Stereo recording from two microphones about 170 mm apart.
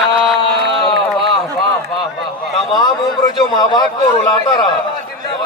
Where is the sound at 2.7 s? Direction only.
25° left (ahead or behind).